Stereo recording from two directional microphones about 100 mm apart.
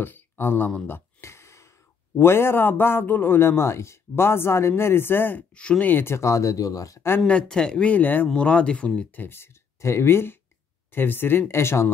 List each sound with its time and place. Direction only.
0.0 s a sound: 20° left (ahead or behind)
2.1 s a man's voice: 25° left (ahead or behind)
7.2 s a man's voice: 10° left (ahead or behind); by 11.9 s 25° left (ahead or behind)